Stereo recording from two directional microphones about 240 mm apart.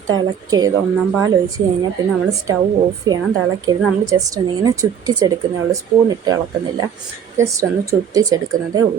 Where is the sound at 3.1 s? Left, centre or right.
Centre.